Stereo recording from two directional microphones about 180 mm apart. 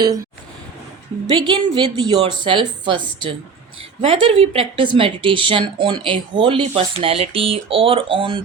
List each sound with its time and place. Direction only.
1.3 s a woman's voice: 25° right (ahead or behind)
4.0 s a woman's voice: 30° right (ahead or behind)